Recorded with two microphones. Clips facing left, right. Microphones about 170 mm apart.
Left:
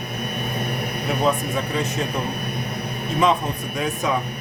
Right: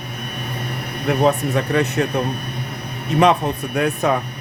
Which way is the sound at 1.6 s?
65° right (ahead or behind).